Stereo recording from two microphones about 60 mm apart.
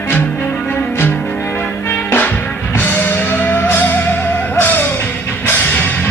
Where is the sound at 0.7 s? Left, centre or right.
Left.